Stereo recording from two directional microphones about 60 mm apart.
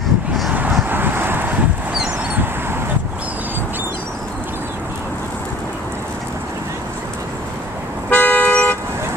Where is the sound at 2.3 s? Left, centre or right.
Right.